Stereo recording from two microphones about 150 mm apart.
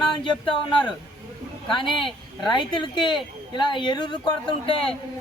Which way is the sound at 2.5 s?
30° left (ahead or behind).